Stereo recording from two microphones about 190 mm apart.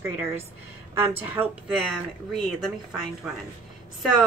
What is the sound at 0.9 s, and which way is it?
Speech, 10° right (ahead or behind).